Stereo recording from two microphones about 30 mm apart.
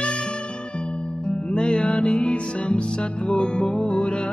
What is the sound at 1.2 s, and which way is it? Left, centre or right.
Music, left.